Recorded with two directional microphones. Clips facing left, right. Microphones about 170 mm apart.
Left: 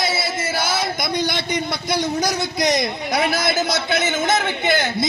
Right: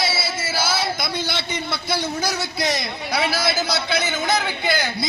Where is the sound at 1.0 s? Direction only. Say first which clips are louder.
Left 4 dB; 15° left (ahead or behind).